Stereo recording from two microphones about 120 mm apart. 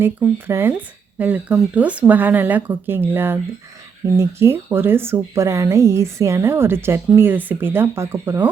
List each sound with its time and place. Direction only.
0.0 s speech: 20° right (ahead or behind)